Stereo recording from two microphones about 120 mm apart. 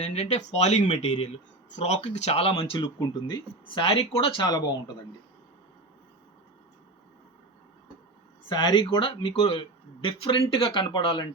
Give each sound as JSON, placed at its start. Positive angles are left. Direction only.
{"t": 0.0, "sound": "speech", "side_deg": 65}
{"t": 3.8, "sound": "speech", "side_deg": 55}
{"t": 4.4, "sound": "speech", "side_deg": 35}
{"t": 8.4, "sound": "speech", "side_deg": 40}